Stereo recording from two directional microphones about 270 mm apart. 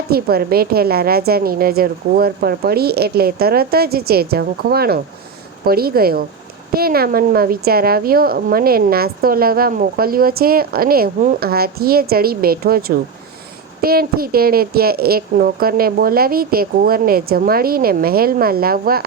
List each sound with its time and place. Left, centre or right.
0.1 s a woman's voice: right
13.8 s a woman's voice: right